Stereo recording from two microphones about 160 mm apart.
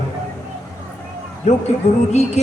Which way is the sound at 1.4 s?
45° left (ahead or behind).